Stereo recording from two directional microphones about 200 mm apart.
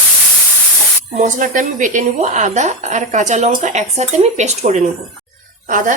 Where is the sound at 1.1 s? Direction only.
40° right (ahead or behind).